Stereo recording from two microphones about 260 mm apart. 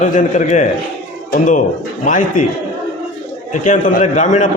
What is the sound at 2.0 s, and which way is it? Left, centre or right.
Speech, left.